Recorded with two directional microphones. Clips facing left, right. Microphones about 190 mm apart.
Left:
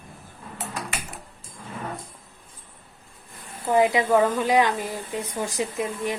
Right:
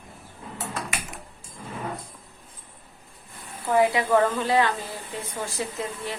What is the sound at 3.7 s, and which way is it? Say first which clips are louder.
A woman's voice: left 1 dB; 20° left (ahead or behind).